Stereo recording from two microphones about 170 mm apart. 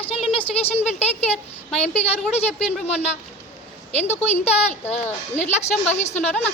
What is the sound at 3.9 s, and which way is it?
A woman's voice, 40° left (ahead or behind).